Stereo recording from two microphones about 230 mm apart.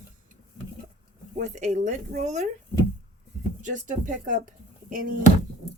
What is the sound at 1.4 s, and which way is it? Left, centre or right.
Speech, right.